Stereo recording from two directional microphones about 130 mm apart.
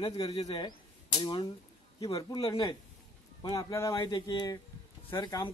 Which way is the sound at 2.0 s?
25° left (ahead or behind).